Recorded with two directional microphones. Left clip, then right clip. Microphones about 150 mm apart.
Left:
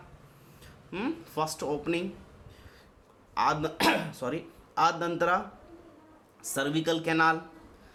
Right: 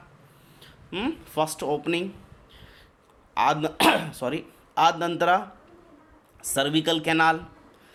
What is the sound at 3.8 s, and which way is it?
Speech, 45° right (ahead or behind).